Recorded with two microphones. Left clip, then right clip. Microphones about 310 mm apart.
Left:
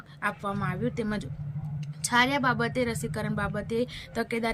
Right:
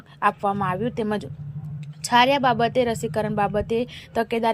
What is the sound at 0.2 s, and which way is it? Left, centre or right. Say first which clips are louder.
A woman's voice: right 9 dB; centre.